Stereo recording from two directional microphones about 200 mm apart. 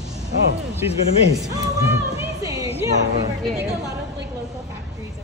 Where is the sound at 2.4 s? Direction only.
15° right (ahead or behind).